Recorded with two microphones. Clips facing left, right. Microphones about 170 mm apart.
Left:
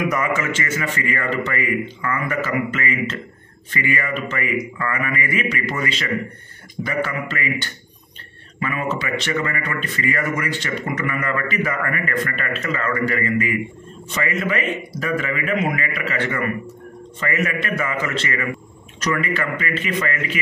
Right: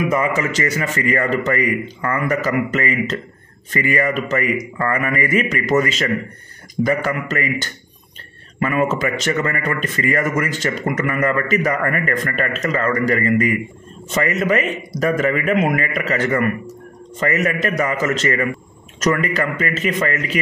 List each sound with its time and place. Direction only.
0.1 s speech: 35° right (ahead or behind)